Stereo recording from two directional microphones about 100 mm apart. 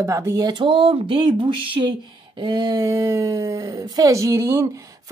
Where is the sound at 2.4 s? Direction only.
45° right (ahead or behind).